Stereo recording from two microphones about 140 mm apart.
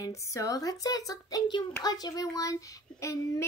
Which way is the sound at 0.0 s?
20° left (ahead or behind).